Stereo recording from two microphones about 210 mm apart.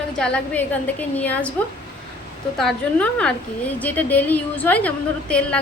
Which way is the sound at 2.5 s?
5° left (ahead or behind).